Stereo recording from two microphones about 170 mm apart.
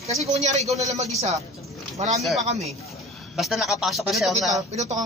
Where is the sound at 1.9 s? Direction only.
40° right (ahead or behind).